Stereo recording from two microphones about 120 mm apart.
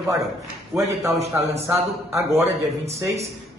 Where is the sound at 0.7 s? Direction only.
Centre (ahead or behind).